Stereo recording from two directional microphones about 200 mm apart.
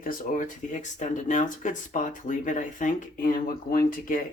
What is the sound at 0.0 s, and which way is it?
Speech, 40° left (ahead or behind).